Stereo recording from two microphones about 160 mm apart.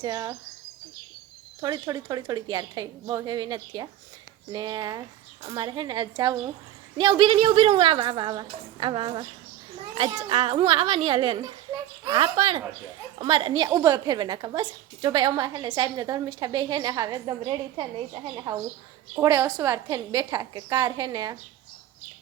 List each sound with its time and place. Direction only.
0.0 s a woman's voice: 25° right (ahead or behind)
1.6 s a woman's voice: 25° right (ahead or behind)
19.1 s a woman's voice: 20° right (ahead or behind)